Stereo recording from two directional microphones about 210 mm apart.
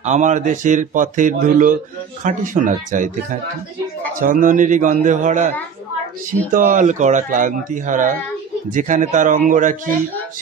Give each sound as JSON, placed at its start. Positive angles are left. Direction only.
{"t": 0.0, "sound": "speech", "side_deg": -35}
{"t": 6.5, "sound": "speech", "side_deg": -35}